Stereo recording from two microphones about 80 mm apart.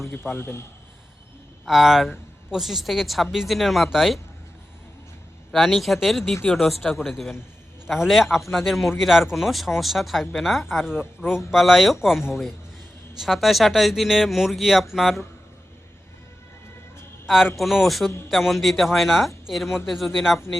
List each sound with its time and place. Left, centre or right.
0.3 s a man's voice: left
1.6 s speech: centre
5.5 s speech: centre
17.2 s speech: centre